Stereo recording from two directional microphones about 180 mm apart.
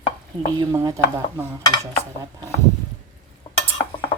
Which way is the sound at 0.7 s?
15° right (ahead or behind).